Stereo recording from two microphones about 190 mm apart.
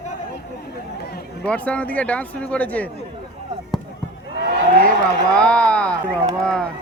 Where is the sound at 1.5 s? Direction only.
5° left (ahead or behind).